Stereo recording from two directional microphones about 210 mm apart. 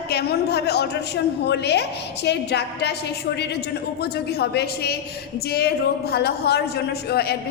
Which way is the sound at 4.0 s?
50° left (ahead or behind).